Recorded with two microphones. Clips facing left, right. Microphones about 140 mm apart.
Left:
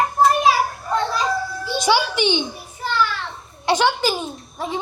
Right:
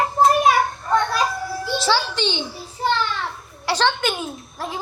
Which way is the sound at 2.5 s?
30° right (ahead or behind).